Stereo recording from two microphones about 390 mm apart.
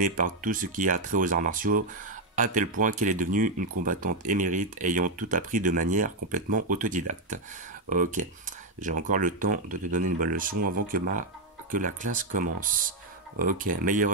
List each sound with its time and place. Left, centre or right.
0.0 s speech: right